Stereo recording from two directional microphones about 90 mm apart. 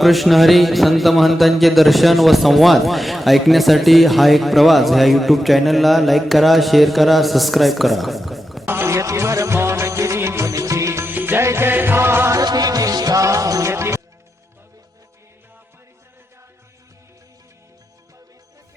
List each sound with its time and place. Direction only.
0.0 s speech: centre (ahead or behind)
8.6 s music: 25° right (ahead or behind)
12.4 s music: 45° right (ahead or behind)